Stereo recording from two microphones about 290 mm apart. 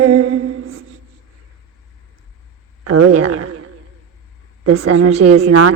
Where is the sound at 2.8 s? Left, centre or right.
Right.